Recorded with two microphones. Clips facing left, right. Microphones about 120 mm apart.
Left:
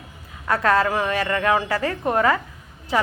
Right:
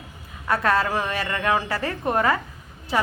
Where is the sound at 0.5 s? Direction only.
20° left (ahead or behind).